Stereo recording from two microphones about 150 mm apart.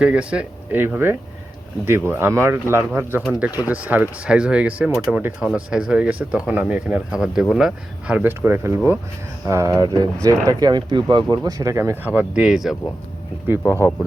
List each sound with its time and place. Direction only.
0.0 s speech: 5° right (ahead or behind)